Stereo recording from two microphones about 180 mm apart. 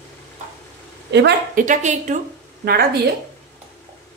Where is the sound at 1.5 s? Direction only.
45° right (ahead or behind).